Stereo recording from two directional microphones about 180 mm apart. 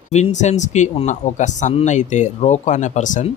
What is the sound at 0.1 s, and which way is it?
Speech, 40° left (ahead or behind).